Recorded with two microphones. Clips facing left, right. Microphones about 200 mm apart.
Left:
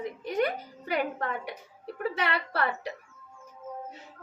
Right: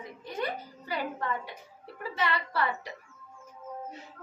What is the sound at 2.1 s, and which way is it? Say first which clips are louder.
Speech: right 4 dB; 65° left (ahead or behind).